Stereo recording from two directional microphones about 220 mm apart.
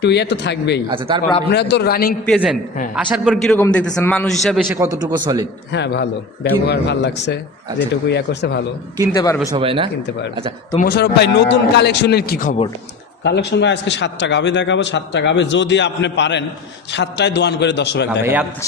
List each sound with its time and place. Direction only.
0.0 s a man's voice: 50° left (ahead or behind)
0.9 s speech: 20° right (ahead or behind)
1.5 s a man's voice: 50° left (ahead or behind)
2.2 s a man's voice: centre (ahead or behind)
4.8 s speech: 15° right (ahead or behind)
5.7 s a man's voice: 50° left (ahead or behind)
9.1 s speech: 15° left (ahead or behind)
9.5 s speech: 25° right (ahead or behind)
10.8 s a man's voice: 45° left (ahead or behind)
18.2 s speech: 10° right (ahead or behind)